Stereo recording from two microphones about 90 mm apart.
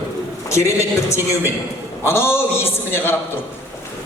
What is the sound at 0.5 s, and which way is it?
A man's voice, 30° left (ahead or behind).